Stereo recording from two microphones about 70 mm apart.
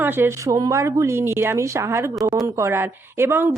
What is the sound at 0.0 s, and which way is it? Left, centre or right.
Speech, right.